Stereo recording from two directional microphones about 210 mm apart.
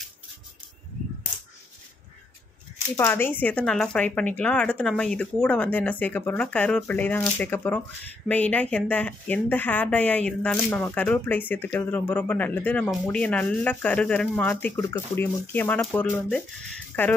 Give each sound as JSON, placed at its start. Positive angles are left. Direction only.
{"t": 3.0, "sound": "a woman's voice", "side_deg": 10}